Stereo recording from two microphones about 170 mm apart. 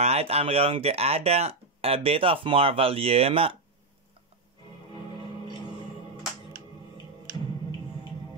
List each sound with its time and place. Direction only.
0.0 s speech: 35° right (ahead or behind)